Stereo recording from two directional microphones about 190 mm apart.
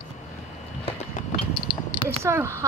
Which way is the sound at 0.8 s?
30° left (ahead or behind).